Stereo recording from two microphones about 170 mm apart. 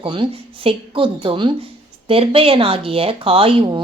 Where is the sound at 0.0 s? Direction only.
30° right (ahead or behind).